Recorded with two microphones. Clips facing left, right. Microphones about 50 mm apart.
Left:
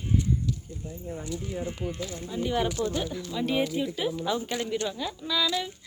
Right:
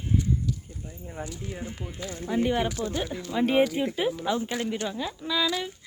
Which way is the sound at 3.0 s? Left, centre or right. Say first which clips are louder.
Right 4 dB; right.